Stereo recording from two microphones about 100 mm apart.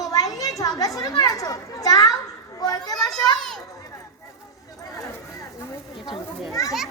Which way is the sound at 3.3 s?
5° left (ahead or behind).